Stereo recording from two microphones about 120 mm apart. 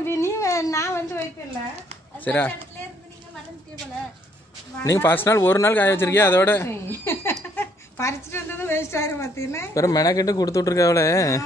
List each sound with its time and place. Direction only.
0.0 s a sound: 20° left (ahead or behind)
2.1 s speech: 15° left (ahead or behind)
4.8 s a woman's voice: 20° left (ahead or behind)